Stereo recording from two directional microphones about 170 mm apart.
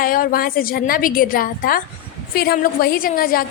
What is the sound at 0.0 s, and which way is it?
A woman's voice, 55° left (ahead or behind).